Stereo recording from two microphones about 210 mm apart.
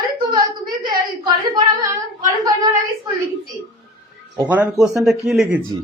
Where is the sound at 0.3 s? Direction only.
45° right (ahead or behind).